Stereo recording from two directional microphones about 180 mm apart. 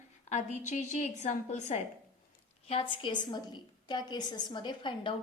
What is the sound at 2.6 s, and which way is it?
A woman's voice, 30° left (ahead or behind).